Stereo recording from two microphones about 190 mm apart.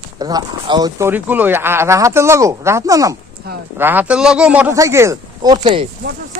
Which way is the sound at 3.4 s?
55° right (ahead or behind).